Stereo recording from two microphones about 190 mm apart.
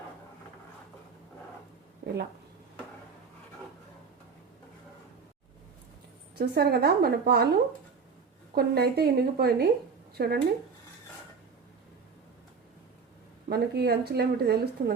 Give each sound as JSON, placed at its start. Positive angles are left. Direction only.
{"t": 6.3, "sound": "speech", "side_deg": -55}
{"t": 13.5, "sound": "speech", "side_deg": -55}